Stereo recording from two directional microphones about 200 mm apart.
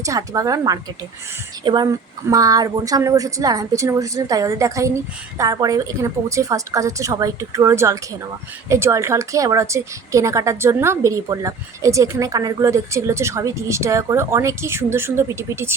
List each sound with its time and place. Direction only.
0.0 s a woman's voice: 15° right (ahead or behind)